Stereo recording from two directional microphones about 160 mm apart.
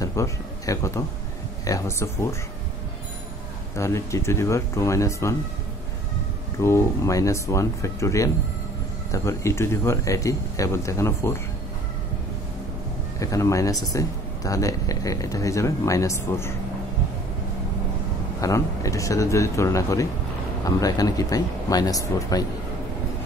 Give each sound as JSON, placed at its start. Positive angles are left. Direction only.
{"t": 0.0, "sound": "speech", "side_deg": 20}
{"t": 3.7, "sound": "speech", "side_deg": 20}
{"t": 6.6, "sound": "speech", "side_deg": 15}
{"t": 13.2, "sound": "speech", "side_deg": 20}
{"t": 18.4, "sound": "speech", "side_deg": 20}